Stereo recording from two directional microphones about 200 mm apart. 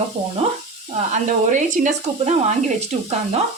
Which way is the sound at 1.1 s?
40° right (ahead or behind).